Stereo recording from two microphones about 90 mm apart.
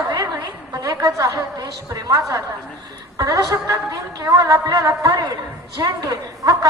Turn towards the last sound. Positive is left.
turn(degrees=-40)  # may be behind; listen again after turning